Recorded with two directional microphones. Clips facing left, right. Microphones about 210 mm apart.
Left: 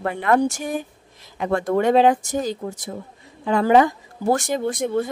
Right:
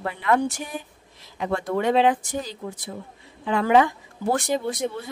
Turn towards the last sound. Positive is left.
turn(degrees=50)  # may be behind; listen again after turning